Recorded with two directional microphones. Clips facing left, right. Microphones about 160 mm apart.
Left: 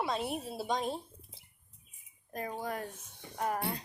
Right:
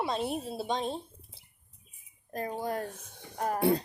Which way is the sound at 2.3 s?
30° right (ahead or behind).